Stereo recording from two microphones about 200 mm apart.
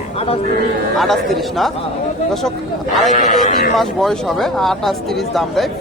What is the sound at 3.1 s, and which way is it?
Speech, 40° left (ahead or behind).